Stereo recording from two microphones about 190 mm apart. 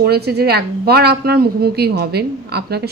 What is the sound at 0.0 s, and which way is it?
Speech, 55° right (ahead or behind).